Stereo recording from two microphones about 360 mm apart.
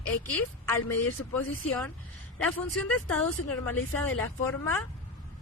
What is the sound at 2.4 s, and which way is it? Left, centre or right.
Speech, centre.